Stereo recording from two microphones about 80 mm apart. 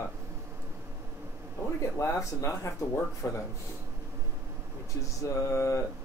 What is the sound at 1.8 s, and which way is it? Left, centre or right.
Speech, left.